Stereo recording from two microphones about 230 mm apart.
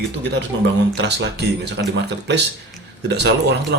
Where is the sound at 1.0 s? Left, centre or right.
Right.